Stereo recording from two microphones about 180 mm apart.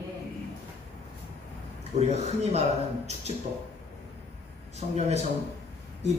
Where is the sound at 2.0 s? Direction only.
35° right (ahead or behind).